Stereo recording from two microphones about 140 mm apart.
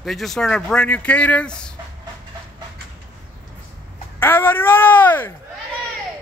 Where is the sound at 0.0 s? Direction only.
Centre (ahead or behind).